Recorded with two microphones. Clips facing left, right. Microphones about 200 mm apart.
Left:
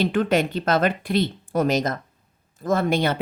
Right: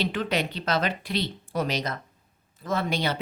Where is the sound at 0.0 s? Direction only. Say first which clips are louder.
Left 7 dB; 50° left (ahead or behind).